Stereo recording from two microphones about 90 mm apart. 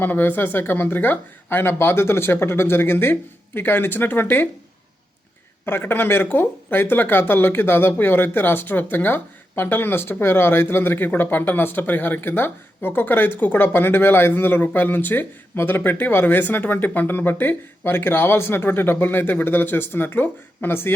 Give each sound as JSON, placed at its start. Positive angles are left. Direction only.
{"t": 0.0, "sound": "speech", "side_deg": 20}
{"t": 5.6, "sound": "speech", "side_deg": 25}